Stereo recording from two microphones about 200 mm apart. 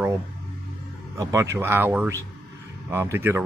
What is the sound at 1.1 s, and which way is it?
Speech, 15° right (ahead or behind).